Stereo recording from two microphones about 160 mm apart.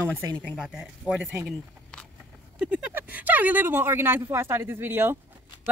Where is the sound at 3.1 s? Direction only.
10° right (ahead or behind).